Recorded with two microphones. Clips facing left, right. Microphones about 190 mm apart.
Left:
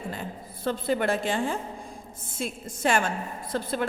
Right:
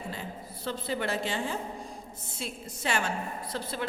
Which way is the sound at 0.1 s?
50° left (ahead or behind).